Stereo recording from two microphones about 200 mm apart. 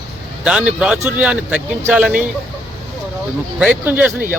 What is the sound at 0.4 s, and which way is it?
Speech, 5° right (ahead or behind).